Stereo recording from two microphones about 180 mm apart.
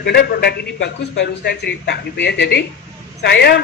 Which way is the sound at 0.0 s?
60° left (ahead or behind).